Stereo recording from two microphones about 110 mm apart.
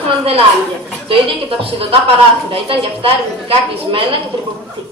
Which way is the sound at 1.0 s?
55° right (ahead or behind).